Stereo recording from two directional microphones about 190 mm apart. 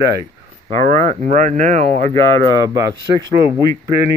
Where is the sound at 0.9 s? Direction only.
35° right (ahead or behind).